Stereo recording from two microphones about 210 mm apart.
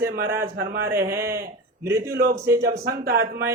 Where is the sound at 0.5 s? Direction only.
45° right (ahead or behind).